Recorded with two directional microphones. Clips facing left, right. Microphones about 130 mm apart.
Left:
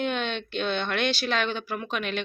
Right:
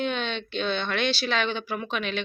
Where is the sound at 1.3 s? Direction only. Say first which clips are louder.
Even; 5° left (ahead or behind).